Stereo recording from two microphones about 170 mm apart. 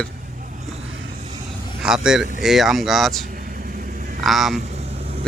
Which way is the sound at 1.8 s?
5° right (ahead or behind).